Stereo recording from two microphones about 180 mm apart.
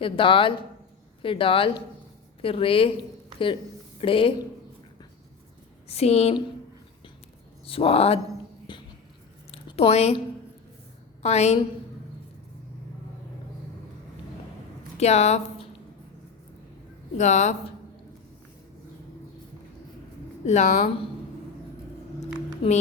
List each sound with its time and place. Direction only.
0.0 s speech: 30° left (ahead or behind)
5.9 s speech: 35° left (ahead or behind)
7.7 s speech: 30° left (ahead or behind)
8.7 s a sound: 25° left (ahead or behind)
11.2 s a woman's voice: 35° left (ahead or behind)
14.9 s speech: 35° left (ahead or behind)
17.2 s speech: 40° left (ahead or behind)
20.4 s speech: 40° left (ahead or behind)
22.6 s speech: 30° left (ahead or behind)